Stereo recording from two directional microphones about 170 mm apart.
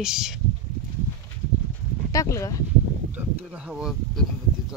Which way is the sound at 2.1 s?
20° left (ahead or behind).